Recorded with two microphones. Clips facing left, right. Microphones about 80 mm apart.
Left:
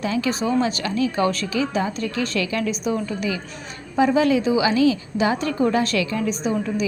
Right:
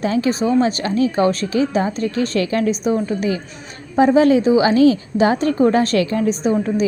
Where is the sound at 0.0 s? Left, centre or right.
Right.